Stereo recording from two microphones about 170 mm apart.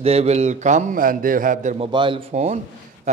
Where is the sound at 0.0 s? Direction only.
35° right (ahead or behind).